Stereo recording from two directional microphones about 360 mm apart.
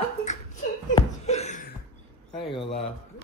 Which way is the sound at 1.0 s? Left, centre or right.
Centre.